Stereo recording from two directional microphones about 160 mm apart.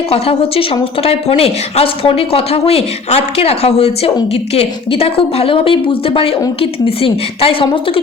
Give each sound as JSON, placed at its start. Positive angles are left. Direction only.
{"t": 0.1, "sound": "a woman's voice", "side_deg": 35}